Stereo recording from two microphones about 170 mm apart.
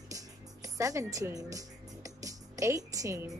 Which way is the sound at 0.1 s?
20° right (ahead or behind).